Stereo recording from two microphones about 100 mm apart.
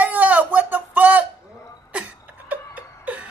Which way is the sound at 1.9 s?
15° right (ahead or behind).